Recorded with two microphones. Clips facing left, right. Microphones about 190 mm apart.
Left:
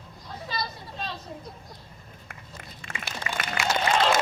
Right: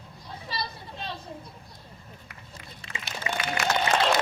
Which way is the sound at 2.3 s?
50° left (ahead or behind).